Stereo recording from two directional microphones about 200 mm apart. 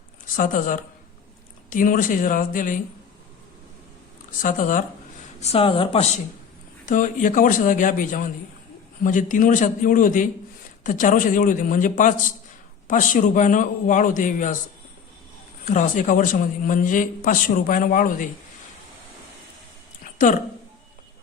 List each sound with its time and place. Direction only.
0.3 s speech: 40° left (ahead or behind)
4.3 s speech: 40° left (ahead or behind)
5.4 s speech: 30° left (ahead or behind)
6.8 s speech: 40° left (ahead or behind)
15.6 s speech: 35° left (ahead or behind)